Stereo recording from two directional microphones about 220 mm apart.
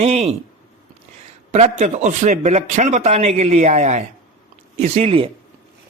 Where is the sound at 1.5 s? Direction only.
30° right (ahead or behind).